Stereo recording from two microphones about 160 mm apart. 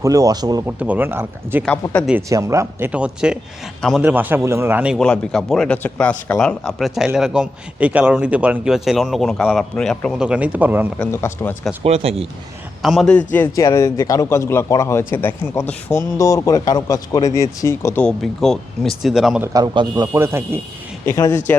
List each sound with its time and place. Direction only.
0.0 s a man's voice: 20° right (ahead or behind)
0.8 s speech: 10° right (ahead or behind)
1.8 s speech: 25° left (ahead or behind)
2.3 s a man's voice: 20° right (ahead or behind); by 4.0 s centre (ahead or behind)
4.0 s speech: 10° right (ahead or behind)
4.9 s a man's voice: 5° left (ahead or behind); by 10.9 s 10° right (ahead or behind)
11.0 s a man's voice: 15° left (ahead or behind)
11.8 s speech: 40° right (ahead or behind)
12.8 s a man's voice: centre (ahead or behind)
19.4 s a man's voice: 25° right (ahead or behind)
20.1 s speech: 15° right (ahead or behind)
21.0 s a man's voice: 15° left (ahead or behind)